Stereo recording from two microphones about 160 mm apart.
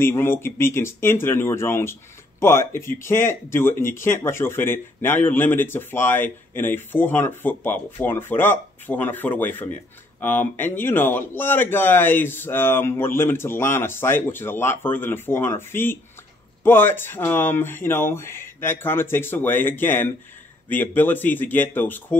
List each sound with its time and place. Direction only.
0.0 s speech: 15° left (ahead or behind)